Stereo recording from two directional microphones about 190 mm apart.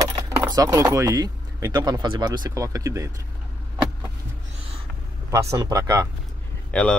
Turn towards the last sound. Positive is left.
turn(degrees=5)  # may be behind; listen again after turning